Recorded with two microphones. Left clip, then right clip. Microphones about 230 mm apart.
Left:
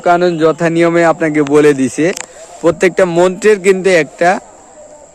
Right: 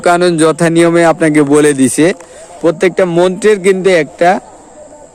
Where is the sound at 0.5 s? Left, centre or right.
Centre.